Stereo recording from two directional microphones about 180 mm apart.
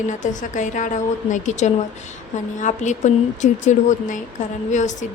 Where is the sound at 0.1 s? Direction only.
45° left (ahead or behind).